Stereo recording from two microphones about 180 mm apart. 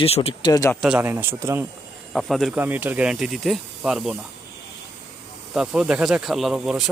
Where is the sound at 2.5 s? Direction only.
10° right (ahead or behind).